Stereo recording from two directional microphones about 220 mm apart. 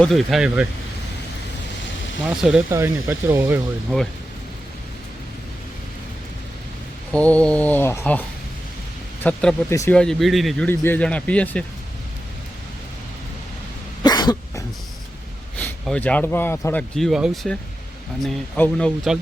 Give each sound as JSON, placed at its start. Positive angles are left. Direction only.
{"t": 0.0, "sound": "speech", "side_deg": 0}
{"t": 2.2, "sound": "speech", "side_deg": 0}
{"t": 7.1, "sound": "speech", "side_deg": 5}
{"t": 9.2, "sound": "speech", "side_deg": 5}
{"t": 14.0, "sound": "cough", "side_deg": 20}
{"t": 15.5, "sound": "speech", "side_deg": 5}